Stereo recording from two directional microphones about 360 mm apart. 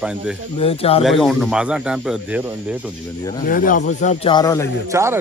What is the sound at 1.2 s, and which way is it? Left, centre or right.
Speech, centre.